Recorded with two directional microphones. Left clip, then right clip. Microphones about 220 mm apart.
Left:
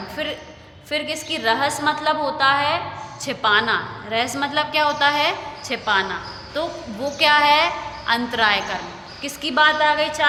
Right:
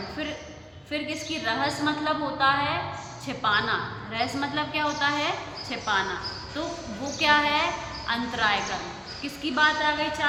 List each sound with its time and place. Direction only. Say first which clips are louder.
0.9 s a woman's voice: left 6 dB; 45° left (ahead or behind)